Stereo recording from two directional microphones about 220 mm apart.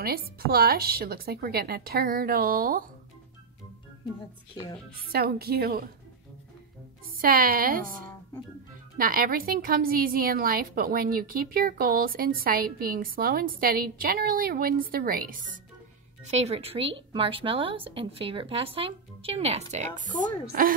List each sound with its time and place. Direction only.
0.0 s speech: 45° right (ahead or behind)
4.6 s a woman's voice: 15° left (ahead or behind)
4.9 s speech: 45° right (ahead or behind)
7.2 s a woman's voice: 40° right (ahead or behind)
8.9 s a woman's voice: 40° right (ahead or behind)